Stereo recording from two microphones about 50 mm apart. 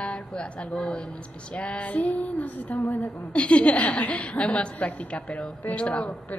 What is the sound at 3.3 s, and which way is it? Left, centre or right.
A woman's voice, left.